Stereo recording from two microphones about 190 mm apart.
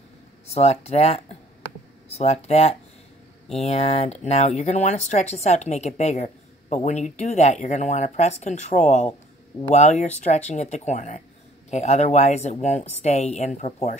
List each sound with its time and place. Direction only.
0.5 s speech: 35° left (ahead or behind)